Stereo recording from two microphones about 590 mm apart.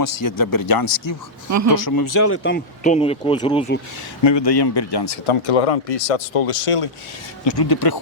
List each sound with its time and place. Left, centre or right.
0.3 s speech: left
1.5 s speech: right
1.7 s speech: left; by 3.8 s centre
4.2 s speech: left
7.4 s speech: left